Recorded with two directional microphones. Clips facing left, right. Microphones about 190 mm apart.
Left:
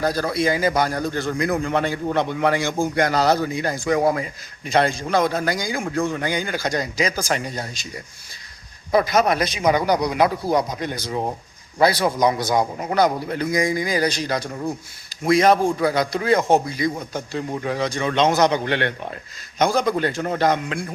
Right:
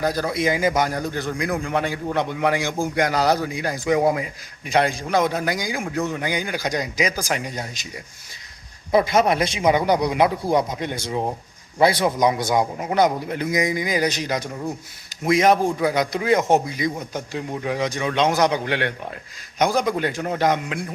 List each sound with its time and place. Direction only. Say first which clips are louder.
0.0 s speech: left 1 dB; 15° right (ahead or behind)
8.9 s a man's voice: even; 25° right (ahead or behind)